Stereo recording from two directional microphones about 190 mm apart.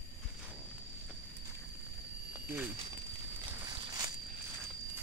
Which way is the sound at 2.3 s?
10° right (ahead or behind).